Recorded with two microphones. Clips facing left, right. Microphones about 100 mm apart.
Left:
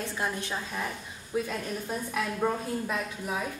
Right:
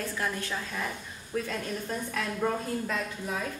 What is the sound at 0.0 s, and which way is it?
A woman's voice, 20° left (ahead or behind).